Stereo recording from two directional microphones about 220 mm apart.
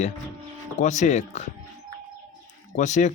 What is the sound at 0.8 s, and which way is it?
Speech, 35° left (ahead or behind).